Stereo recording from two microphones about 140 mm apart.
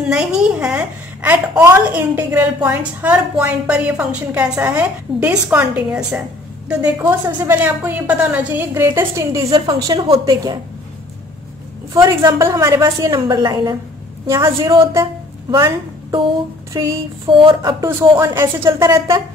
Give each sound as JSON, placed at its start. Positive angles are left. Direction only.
{"t": 0.1, "sound": "a woman's voice", "side_deg": -5}
{"t": 11.9, "sound": "a woman's voice", "side_deg": -25}
{"t": 16.8, "sound": "a woman's voice", "side_deg": -30}
{"t": 17.8, "sound": "a woman's voice", "side_deg": -20}